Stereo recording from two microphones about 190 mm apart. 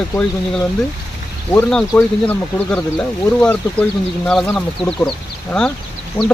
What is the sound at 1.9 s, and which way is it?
Speech, 10° left (ahead or behind).